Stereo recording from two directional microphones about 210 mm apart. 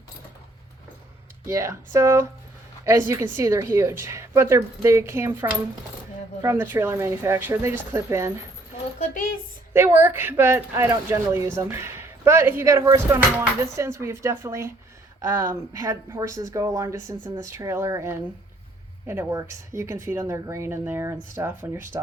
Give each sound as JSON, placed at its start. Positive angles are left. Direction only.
{"t": 1.5, "sound": "speech", "side_deg": -15}
{"t": 9.0, "sound": "a sound", "side_deg": 40}
{"t": 9.7, "sound": "speech", "side_deg": -10}